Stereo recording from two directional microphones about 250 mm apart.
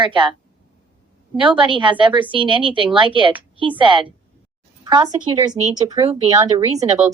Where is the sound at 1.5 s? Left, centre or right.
Centre.